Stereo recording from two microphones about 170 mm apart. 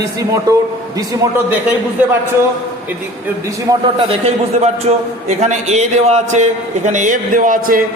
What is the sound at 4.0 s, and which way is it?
A man's voice, 35° right (ahead or behind).